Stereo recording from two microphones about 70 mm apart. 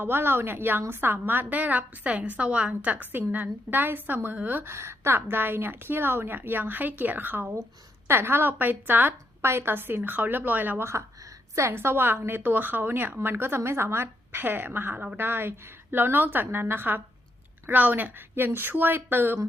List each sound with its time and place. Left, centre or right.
0.0 s a woman's voice: right
4.7 s a woman's voice: right
10.8 s a woman's voice: right